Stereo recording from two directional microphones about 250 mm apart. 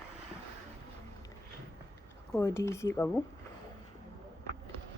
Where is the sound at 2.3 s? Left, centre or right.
Centre.